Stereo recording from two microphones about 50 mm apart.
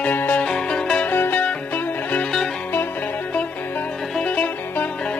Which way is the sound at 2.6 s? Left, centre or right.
Left.